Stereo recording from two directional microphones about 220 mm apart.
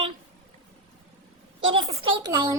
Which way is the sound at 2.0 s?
20° right (ahead or behind).